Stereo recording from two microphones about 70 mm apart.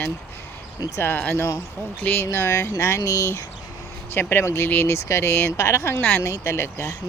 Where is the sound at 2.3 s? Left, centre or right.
Left.